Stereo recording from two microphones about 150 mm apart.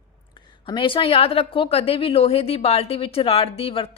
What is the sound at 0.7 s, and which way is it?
A woman's voice, 35° left (ahead or behind).